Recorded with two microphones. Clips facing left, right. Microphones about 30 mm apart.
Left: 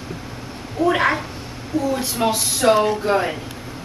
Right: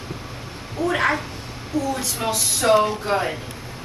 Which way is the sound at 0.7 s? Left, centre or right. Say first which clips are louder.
Left 3 dB; centre.